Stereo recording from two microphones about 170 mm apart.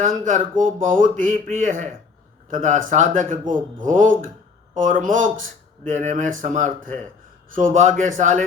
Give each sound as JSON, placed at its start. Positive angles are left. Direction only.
{"t": 0.3, "sound": "speech", "side_deg": -50}